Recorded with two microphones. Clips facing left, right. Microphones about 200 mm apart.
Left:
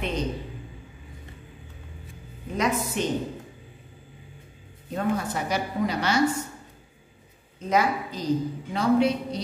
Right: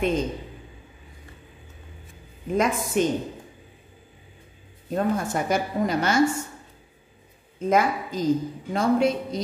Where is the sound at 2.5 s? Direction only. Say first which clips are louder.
Right 3 dB; 50° right (ahead or behind).